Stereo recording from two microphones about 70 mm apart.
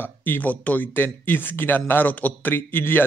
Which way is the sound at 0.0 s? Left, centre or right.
Left.